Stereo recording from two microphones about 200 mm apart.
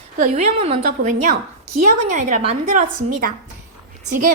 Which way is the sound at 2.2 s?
40° right (ahead or behind).